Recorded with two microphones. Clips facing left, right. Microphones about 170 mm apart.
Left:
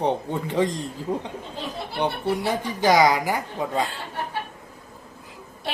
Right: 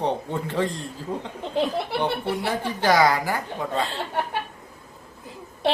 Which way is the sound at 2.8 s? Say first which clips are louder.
Left 1 dB; 15° left (ahead or behind).